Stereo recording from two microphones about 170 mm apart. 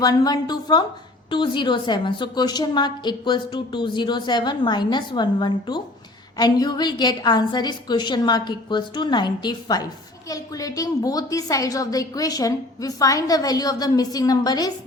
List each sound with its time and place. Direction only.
0.0 s a woman's voice: 25° left (ahead or behind)